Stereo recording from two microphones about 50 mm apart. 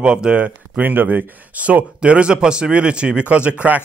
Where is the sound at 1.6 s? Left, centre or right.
Right.